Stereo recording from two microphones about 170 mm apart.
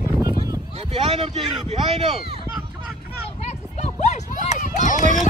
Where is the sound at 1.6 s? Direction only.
40° right (ahead or behind).